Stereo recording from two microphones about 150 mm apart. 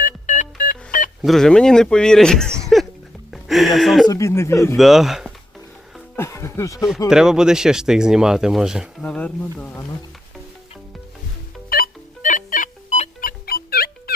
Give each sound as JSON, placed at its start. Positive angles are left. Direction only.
{"t": 0.0, "sound": "music", "side_deg": 60}
{"t": 1.2, "sound": "speech", "side_deg": 0}
{"t": 4.1, "sound": "speech", "side_deg": 20}
{"t": 4.8, "sound": "speech", "side_deg": 0}
{"t": 6.1, "sound": "speech", "side_deg": 20}
{"t": 7.1, "sound": "speech", "side_deg": -5}
{"t": 9.0, "sound": "speech", "side_deg": 10}
{"t": 11.7, "sound": "music", "side_deg": 70}
{"t": 13.2, "sound": "music", "side_deg": 85}